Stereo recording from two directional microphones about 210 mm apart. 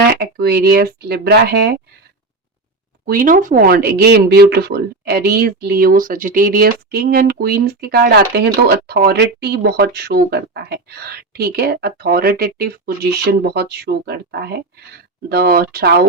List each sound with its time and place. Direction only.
0.1 s speech: 50° right (ahead or behind)
3.1 s speech: 40° right (ahead or behind)